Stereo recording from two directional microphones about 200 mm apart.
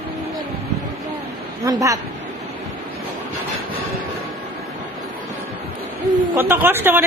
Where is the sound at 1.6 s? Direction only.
15° right (ahead or behind).